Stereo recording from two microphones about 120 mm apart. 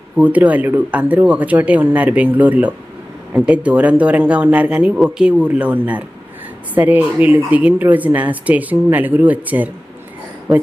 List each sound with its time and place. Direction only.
0.2 s speech: 10° right (ahead or behind)